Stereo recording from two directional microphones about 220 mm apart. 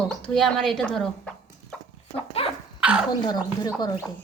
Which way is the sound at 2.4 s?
25° left (ahead or behind).